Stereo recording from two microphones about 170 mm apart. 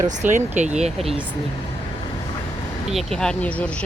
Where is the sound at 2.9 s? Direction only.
5° left (ahead or behind).